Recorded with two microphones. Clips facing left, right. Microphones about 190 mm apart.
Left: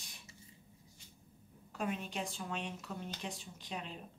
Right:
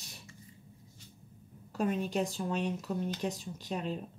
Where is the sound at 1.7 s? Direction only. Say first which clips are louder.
Right 8 dB; 40° right (ahead or behind).